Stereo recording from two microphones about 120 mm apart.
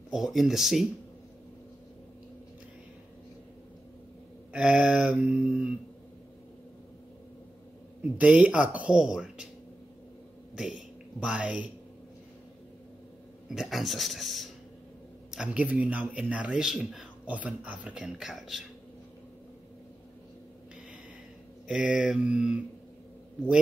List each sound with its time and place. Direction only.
0.1 s speech: centre (ahead or behind)
4.5 s a man's voice: 10° right (ahead or behind)
8.2 s a man's voice: 10° right (ahead or behind)
10.5 s speech: 5° right (ahead or behind)
13.6 s speech: centre (ahead or behind)
15.3 s a man's voice: 10° right (ahead or behind)
21.6 s a man's voice: 10° right (ahead or behind)